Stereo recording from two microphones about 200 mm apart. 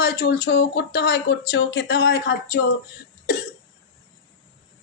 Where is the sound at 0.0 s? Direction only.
55° left (ahead or behind).